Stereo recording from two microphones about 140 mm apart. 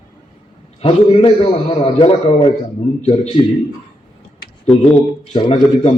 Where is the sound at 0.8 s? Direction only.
40° left (ahead or behind).